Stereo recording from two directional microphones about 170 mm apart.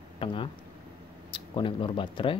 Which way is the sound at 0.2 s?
30° left (ahead or behind).